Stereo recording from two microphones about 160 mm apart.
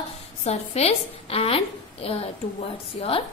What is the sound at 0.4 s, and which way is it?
A woman's voice, 40° left (ahead or behind).